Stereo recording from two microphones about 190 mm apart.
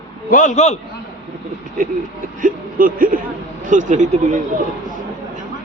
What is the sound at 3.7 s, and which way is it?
Speech, 40° right (ahead or behind).